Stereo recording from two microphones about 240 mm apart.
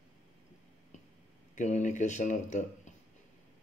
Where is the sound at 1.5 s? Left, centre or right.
Left.